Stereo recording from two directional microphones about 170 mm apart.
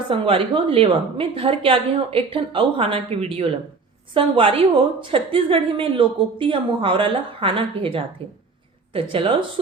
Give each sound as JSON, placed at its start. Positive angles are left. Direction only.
{"t": 0.1, "sound": "a woman's voice", "side_deg": -30}